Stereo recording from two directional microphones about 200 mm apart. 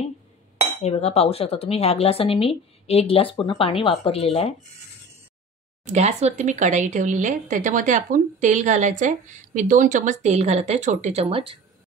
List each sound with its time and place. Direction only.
0.8 s speech: 30° left (ahead or behind)
5.9 s speech: 35° right (ahead or behind)